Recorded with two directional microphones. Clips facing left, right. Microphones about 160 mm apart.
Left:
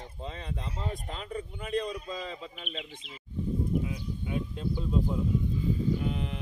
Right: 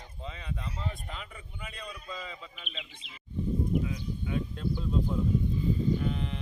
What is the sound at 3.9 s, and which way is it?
Sheep, 10° left (ahead or behind).